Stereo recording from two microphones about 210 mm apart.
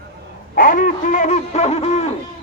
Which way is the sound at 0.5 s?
40° left (ahead or behind).